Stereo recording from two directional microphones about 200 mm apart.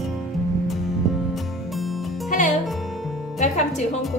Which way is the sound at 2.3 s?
40° left (ahead or behind).